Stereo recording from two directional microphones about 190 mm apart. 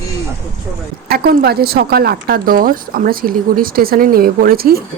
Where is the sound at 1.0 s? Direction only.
55° right (ahead or behind).